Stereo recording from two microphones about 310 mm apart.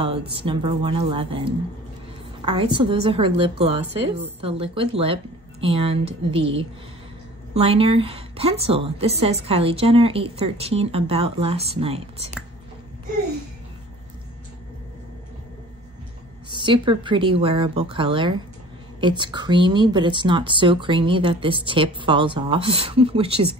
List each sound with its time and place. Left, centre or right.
0.0 s a woman's voice: centre
16.4 s a woman's voice: centre